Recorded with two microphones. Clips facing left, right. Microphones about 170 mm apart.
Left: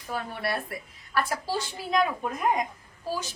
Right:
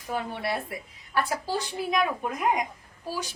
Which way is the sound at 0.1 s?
20° right (ahead or behind).